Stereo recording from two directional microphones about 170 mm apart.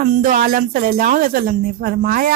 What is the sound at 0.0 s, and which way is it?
Speech, 55° right (ahead or behind).